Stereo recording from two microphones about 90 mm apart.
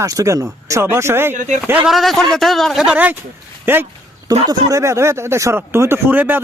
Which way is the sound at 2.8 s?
15° right (ahead or behind).